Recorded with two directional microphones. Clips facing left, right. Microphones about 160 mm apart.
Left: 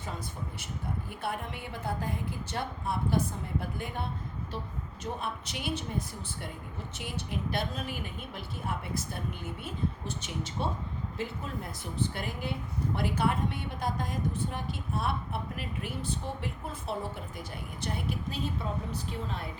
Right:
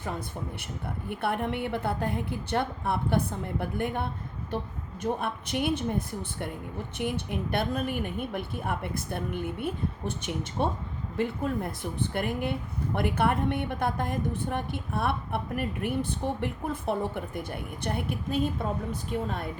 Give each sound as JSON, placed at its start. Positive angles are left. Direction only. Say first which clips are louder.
{"t": 1.1, "sound": "speech", "louder": "right 10 dB", "side_deg": -60}